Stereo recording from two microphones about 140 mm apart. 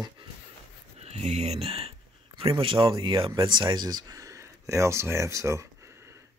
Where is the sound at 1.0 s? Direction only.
50° right (ahead or behind).